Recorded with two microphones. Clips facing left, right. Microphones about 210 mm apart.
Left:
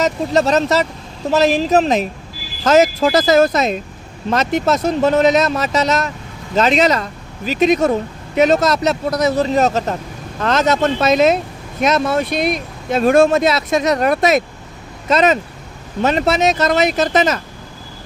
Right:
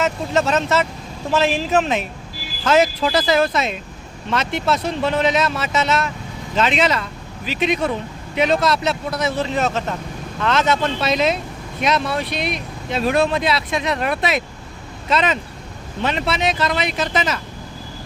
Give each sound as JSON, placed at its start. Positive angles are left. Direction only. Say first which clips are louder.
{"t": 0.0, "sound": "speech", "louder": "left 4 dB", "side_deg": 40}